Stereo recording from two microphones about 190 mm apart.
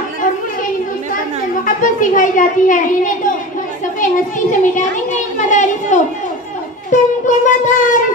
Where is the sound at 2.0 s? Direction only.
45° left (ahead or behind).